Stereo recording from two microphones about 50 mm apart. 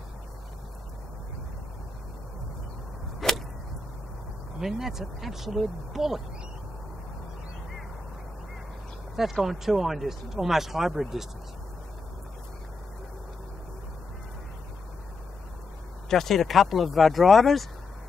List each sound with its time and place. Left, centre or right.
3.2 s a sound: centre
4.6 s speech: centre
9.1 s speech: centre
16.1 s speech: centre